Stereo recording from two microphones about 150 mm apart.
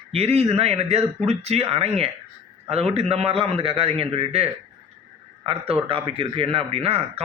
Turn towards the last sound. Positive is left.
turn(degrees=-40)  # may be behind; listen again after turning